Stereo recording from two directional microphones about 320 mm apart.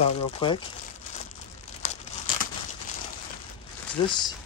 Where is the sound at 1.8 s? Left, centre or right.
Left.